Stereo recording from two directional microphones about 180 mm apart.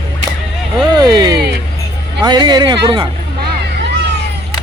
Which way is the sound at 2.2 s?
25° right (ahead or behind).